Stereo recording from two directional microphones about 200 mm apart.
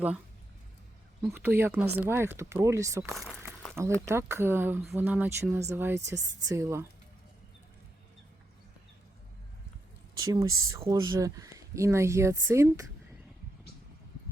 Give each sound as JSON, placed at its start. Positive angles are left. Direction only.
{"t": 1.2, "sound": "speech", "side_deg": -10}
{"t": 3.2, "sound": "a sound", "side_deg": 0}
{"t": 4.0, "sound": "speech", "side_deg": -15}
{"t": 10.2, "sound": "speech", "side_deg": -20}